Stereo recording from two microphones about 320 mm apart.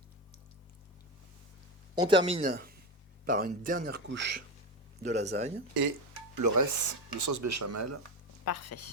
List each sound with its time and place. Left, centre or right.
2.0 s speech: centre; by 4.4 s right
5.0 s speech: right
6.3 s speech: right
8.4 s speech: left